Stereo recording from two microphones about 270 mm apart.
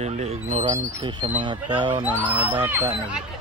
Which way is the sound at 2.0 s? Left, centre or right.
Centre.